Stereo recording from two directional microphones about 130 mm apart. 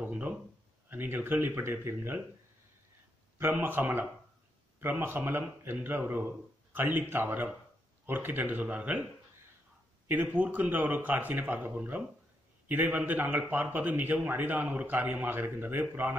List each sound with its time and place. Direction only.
0.0 s a sound: 10° right (ahead or behind)
0.8 s a man's voice: 15° right (ahead or behind)
3.3 s a man's voice: 15° right (ahead or behind)
10.0 s a man's voice: 15° right (ahead or behind)